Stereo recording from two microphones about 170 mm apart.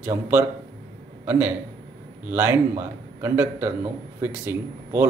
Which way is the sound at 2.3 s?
15° right (ahead or behind).